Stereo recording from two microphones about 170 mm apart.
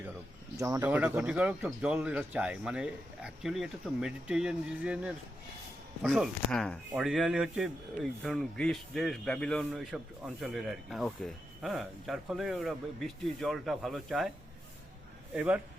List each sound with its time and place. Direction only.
0.6 s speech: 20° right (ahead or behind); by 14.3 s centre (ahead or behind)
15.4 s speech: 10° right (ahead or behind)